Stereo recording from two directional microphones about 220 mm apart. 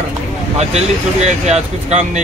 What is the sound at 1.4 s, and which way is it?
Speech, 30° right (ahead or behind).